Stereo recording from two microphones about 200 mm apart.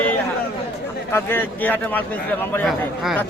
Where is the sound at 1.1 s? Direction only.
10° left (ahead or behind).